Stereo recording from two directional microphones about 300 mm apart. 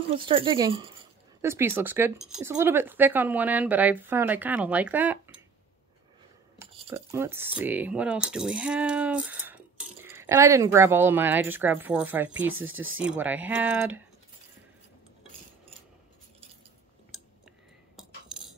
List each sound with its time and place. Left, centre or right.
0.1 s speech: centre
6.6 s speech: centre
12.6 s speech: right
13.0 s speech: centre